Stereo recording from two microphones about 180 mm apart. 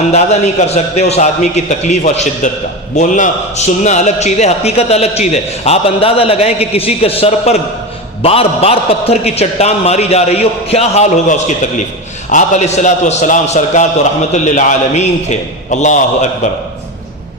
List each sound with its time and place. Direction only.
0.1 s a man's voice: 35° left (ahead or behind)